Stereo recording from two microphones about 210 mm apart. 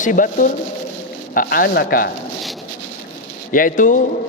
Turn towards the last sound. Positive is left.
turn(degrees=40)  # may be behind; listen again after turning